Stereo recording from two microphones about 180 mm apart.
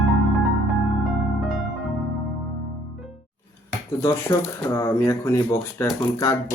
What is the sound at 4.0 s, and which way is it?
Speech, 15° left (ahead or behind).